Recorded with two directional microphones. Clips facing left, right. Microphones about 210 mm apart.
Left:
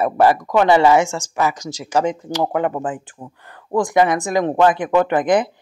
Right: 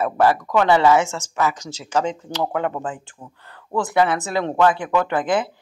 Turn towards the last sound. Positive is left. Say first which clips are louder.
# left 5 dB
turn(degrees=20)  # may be behind; listen again after turning